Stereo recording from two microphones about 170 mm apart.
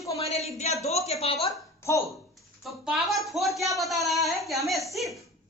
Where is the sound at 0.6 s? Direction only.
40° left (ahead or behind).